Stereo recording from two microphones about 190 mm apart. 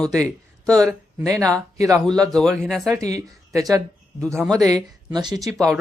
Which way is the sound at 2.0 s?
5° left (ahead or behind).